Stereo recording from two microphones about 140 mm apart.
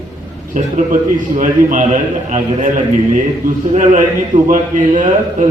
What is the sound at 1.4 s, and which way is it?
A man's voice, 65° right (ahead or behind).